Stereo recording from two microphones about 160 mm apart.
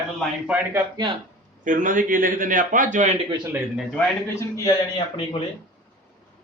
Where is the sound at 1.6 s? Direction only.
55° right (ahead or behind).